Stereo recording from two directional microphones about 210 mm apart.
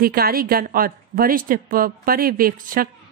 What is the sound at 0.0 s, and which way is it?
A woman's voice, 45° right (ahead or behind).